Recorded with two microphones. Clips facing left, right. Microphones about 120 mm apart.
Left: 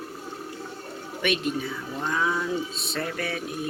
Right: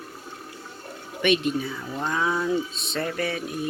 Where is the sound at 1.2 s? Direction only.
Centre (ahead or behind).